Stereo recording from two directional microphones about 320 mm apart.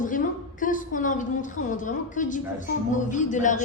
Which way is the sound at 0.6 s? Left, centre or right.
Left.